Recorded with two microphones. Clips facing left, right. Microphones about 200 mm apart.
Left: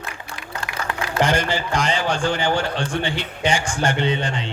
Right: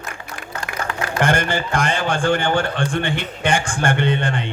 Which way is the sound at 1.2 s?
55° right (ahead or behind).